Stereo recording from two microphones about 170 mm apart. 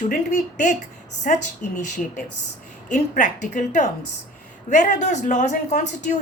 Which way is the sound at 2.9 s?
45° left (ahead or behind).